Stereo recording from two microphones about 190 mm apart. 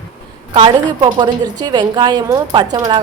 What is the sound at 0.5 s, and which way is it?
Speech, 25° right (ahead or behind).